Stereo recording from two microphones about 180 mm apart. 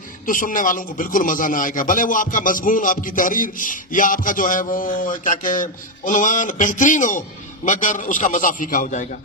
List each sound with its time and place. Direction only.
0.3 s speech: 50° left (ahead or behind)